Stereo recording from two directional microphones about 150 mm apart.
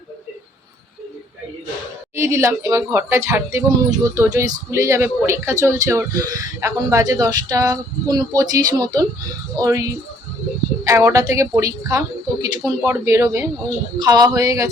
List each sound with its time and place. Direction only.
2.1 s speech: 20° right (ahead or behind)